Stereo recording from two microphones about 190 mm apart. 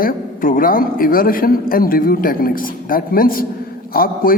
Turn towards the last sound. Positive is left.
turn(degrees=50)  # may be behind; listen again after turning